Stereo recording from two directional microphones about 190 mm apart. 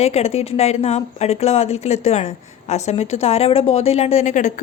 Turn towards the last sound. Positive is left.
turn(degrees=40)  # may be behind; listen again after turning